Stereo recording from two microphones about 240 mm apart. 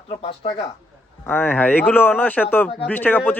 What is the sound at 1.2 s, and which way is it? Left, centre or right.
Speech, centre.